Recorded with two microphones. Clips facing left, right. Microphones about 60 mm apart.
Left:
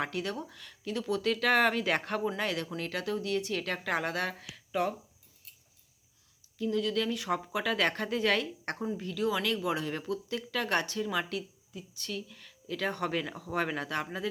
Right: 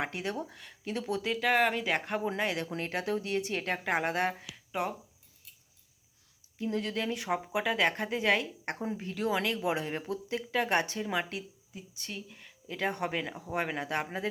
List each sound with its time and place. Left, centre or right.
0.0 s speech: right
1.2 s speech: centre
2.2 s speech: right
6.6 s speech: right; by 8.8 s centre
9.0 s speech: right